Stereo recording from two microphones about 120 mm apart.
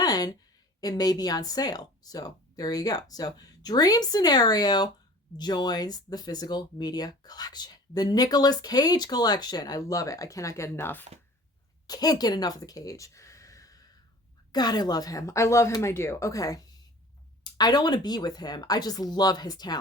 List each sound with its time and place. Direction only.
0.0 s a sound: 30° left (ahead or behind)
0.8 s speech: 30° left (ahead or behind)
11.9 s a woman's voice: 30° left (ahead or behind)